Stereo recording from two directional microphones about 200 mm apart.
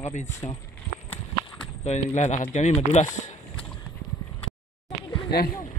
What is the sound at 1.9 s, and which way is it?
Speech, 35° left (ahead or behind).